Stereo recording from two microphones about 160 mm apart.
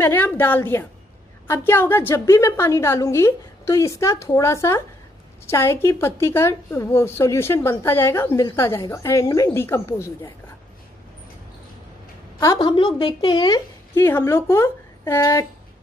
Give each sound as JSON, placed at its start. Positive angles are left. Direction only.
{"t": 0.0, "sound": "a woman's voice", "side_deg": 15}
{"t": 12.4, "sound": "a woman's voice", "side_deg": 20}
{"t": 13.9, "sound": "a woman's voice", "side_deg": 15}